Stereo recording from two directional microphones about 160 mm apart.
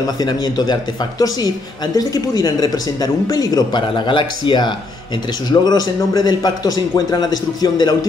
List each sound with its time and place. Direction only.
0.0 s speech: 25° left (ahead or behind)
2.0 s speech: 25° left (ahead or behind)